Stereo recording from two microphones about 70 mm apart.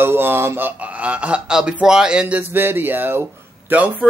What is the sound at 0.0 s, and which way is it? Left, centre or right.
A man's voice, right.